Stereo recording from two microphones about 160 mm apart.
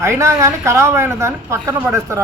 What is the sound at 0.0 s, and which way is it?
A man's voice, 15° right (ahead or behind).